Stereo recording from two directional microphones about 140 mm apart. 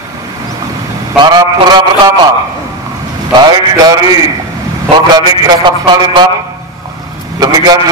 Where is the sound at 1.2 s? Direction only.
30° right (ahead or behind).